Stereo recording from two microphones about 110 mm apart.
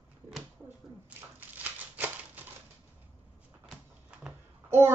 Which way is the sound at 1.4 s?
15° right (ahead or behind).